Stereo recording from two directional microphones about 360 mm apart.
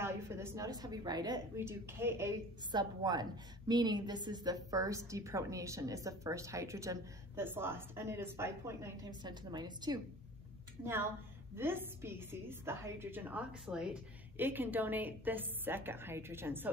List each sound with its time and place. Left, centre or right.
0.0 s a woman's voice: centre